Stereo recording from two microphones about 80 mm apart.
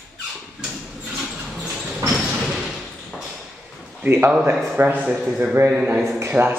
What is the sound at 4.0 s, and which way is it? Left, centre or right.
Speech, right.